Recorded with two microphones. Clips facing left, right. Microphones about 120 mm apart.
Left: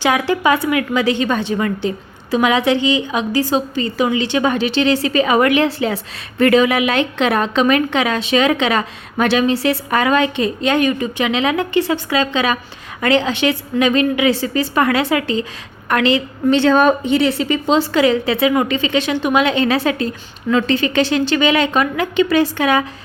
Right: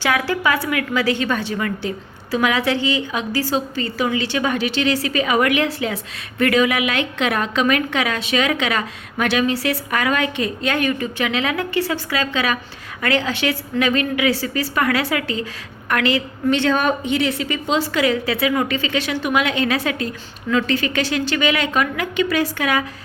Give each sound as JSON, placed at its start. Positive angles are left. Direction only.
{"t": 0.0, "sound": "a woman's voice", "side_deg": 20}